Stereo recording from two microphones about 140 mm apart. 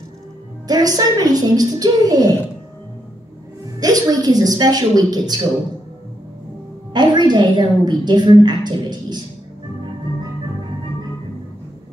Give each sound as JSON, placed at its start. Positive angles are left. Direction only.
{"t": 0.7, "sound": "a woman's voice", "side_deg": -25}
{"t": 3.8, "sound": "a woman's voice", "side_deg": -25}
{"t": 6.9, "sound": "a woman's voice", "side_deg": -30}